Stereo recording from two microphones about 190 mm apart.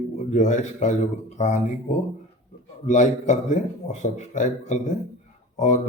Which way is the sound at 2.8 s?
40° left (ahead or behind).